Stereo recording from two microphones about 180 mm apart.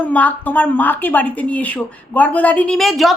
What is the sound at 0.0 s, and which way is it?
A woman's voice, 10° left (ahead or behind).